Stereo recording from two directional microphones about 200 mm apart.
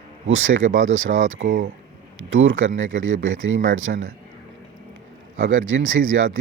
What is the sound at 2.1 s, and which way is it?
Speech, 75° right (ahead or behind).